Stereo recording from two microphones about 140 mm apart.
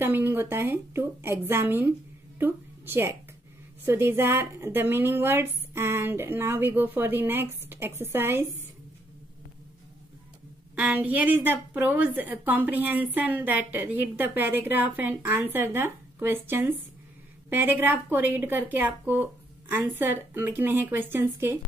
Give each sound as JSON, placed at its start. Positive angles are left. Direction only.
{"t": 0.0, "sound": "a woman's voice", "side_deg": -15}
{"t": 10.8, "sound": "a woman's voice", "side_deg": -10}